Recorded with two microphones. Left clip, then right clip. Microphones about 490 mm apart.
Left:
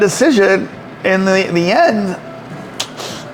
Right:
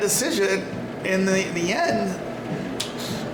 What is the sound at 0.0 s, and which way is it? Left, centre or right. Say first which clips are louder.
A man's voice: left 11 dB; left.